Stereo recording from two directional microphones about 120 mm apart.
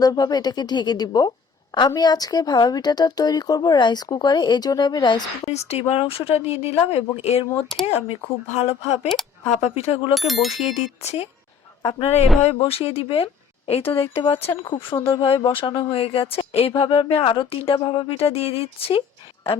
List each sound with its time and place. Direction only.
0.0 s speech: 30° left (ahead or behind)
5.5 s speech: 60° left (ahead or behind)
10.2 s speech: centre (ahead or behind)
11.0 s speech: 60° left (ahead or behind)
13.8 s speech: 20° left (ahead or behind)
14.3 s speech: 55° left (ahead or behind)
14.6 s speech: 45° left (ahead or behind)
14.9 s speech: 20° left (ahead or behind)
15.4 s speech: 40° left (ahead or behind)